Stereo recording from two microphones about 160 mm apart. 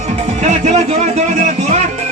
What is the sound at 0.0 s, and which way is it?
Music, 45° right (ahead or behind).